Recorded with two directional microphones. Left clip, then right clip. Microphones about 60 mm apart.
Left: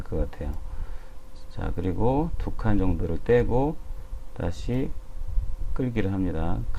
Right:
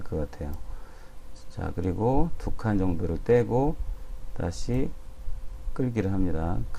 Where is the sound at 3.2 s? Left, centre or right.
Right.